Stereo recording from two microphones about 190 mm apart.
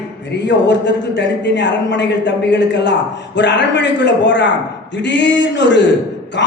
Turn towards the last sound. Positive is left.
turn(degrees=70)  # may be behind; listen again after turning